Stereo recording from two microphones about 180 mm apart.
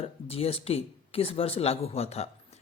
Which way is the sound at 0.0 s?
35° left (ahead or behind).